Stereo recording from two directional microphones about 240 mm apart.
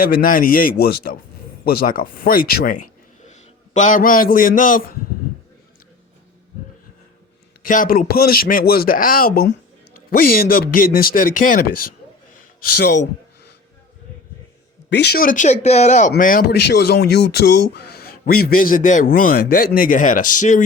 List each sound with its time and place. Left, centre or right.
0.0 s a man's voice: left
7.6 s a man's voice: left
14.8 s a man's voice: left